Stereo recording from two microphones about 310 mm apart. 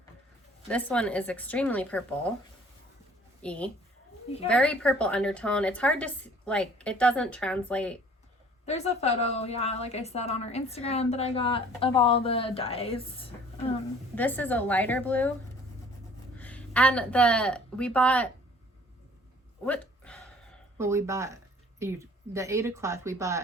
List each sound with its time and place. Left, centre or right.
0.7 s a woman's voice: centre
3.4 s a woman's voice: centre
8.6 s a woman's voice: left
14.2 s a woman's voice: centre
16.4 s speech: centre
19.6 s a sound: centre
20.7 s a woman's voice: centre